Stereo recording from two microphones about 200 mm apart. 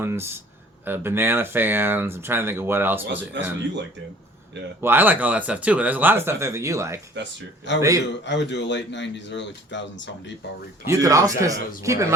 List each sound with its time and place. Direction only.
0.0 s speech: 10° right (ahead or behind)
3.1 s speech: 60° right (ahead or behind)
4.8 s speech: 10° right (ahead or behind)
8.2 s speech: 60° left (ahead or behind)
10.8 s speech: 15° right (ahead or behind)